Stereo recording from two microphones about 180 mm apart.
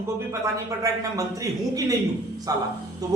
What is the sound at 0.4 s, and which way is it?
A man's voice, 20° right (ahead or behind).